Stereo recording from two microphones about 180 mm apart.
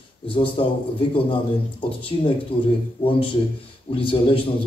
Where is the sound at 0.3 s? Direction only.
30° left (ahead or behind).